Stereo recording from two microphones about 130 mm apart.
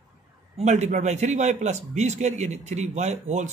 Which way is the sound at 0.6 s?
60° right (ahead or behind).